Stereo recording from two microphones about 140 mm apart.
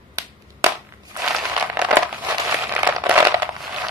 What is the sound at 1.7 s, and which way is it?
Crumpling, 15° right (ahead or behind).